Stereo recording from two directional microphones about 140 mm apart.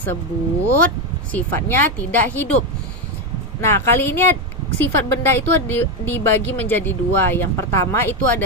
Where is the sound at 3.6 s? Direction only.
15° left (ahead or behind).